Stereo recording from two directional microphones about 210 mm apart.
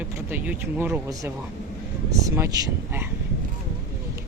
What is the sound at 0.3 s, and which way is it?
Speech, 10° right (ahead or behind).